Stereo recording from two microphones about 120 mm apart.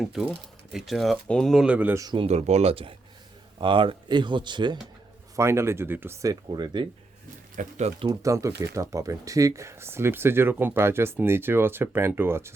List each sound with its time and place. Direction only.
0.0 s speech: 5° right (ahead or behind)
1.6 s speech: 15° right (ahead or behind)
2.1 s speech: 60° right (ahead or behind); by 4.8 s 40° right (ahead or behind)
5.4 s speech: 20° right (ahead or behind)
6.2 s speech: 40° right (ahead or behind)
7.5 s speech: 80° right
8.2 s speech: 25° right (ahead or behind)